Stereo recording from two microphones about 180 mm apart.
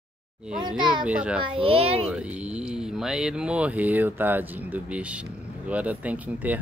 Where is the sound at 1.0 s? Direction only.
5° right (ahead or behind).